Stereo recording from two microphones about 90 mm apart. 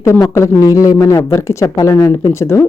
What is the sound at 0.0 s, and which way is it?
Speech, 35° left (ahead or behind).